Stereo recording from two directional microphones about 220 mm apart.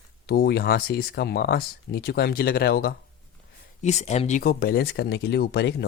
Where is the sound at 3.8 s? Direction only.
30° left (ahead or behind).